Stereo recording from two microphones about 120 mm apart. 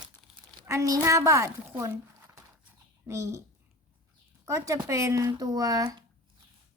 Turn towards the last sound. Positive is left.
turn(degrees=-30)  # may be behind; listen again after turning